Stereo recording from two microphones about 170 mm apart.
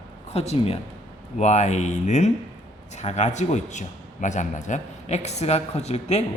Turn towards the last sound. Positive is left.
turn(degrees=40)  # may be behind; listen again after turning